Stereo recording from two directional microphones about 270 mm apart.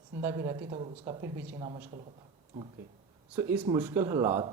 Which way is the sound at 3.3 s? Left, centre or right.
Centre.